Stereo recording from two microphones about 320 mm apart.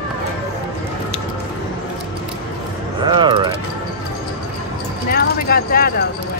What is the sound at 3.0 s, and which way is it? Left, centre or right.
Mechanisms, centre.